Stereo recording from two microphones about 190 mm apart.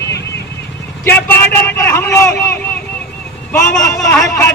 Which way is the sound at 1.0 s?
10° left (ahead or behind).